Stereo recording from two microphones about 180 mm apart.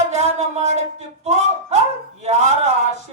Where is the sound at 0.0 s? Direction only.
40° right (ahead or behind).